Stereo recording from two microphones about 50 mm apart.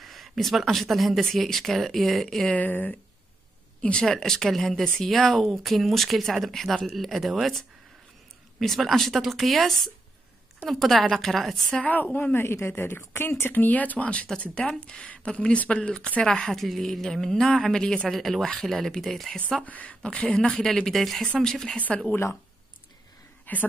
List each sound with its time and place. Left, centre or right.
0.0 s speech: centre
2.5 s speech: left
4.0 s speech: centre
11.8 s speech: left
12.4 s speech: left
13.1 s speech: left
13.4 s speech: left; by 19.3 s centre
19.6 s speech: left
20.8 s speech: centre
21.7 s speech: left
23.5 s a woman's voice: left